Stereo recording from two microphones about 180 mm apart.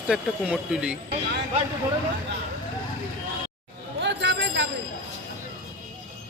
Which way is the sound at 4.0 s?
80° right.